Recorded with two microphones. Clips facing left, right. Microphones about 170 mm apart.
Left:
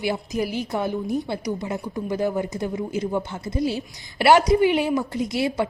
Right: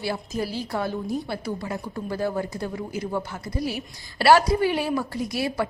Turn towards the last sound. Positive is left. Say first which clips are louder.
# left 3 dB
turn(degrees=20)  # may be behind; listen again after turning